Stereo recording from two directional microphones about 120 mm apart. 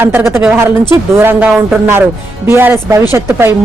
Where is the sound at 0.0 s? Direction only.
20° right (ahead or behind).